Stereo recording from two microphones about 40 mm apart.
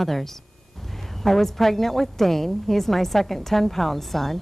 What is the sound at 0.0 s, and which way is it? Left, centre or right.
A woman's voice, centre.